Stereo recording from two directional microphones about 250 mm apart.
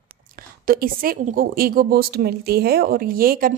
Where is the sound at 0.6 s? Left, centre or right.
Right.